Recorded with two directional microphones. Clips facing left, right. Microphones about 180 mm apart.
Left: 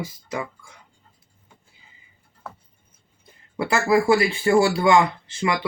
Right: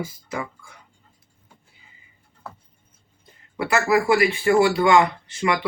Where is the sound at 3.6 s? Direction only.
30° left (ahead or behind).